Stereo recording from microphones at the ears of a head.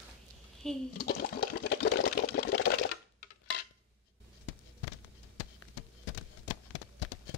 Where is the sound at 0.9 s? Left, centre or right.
Left.